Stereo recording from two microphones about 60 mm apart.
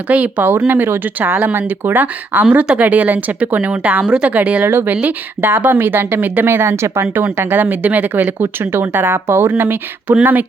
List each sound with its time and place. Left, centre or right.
0.1 s speech: right
4.0 s speech: centre
4.3 s speech: right
4.7 s speech: right
7.3 s speech: right